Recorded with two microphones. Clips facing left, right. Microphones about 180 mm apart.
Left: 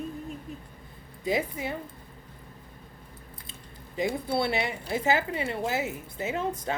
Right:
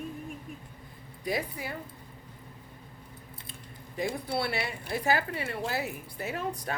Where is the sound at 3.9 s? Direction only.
25° left (ahead or behind).